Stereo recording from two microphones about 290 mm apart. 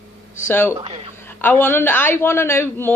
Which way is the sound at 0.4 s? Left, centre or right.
Centre.